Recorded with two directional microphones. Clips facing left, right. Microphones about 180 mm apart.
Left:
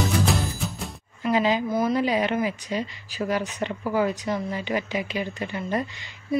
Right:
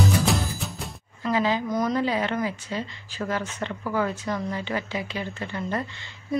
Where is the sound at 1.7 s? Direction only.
5° left (ahead or behind).